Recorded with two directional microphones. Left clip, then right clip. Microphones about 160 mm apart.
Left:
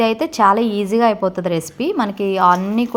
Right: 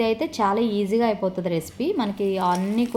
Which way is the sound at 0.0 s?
35° left (ahead or behind).